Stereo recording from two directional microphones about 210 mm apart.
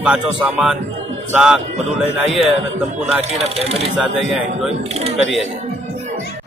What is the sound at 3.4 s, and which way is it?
Speech, 30° right (ahead or behind).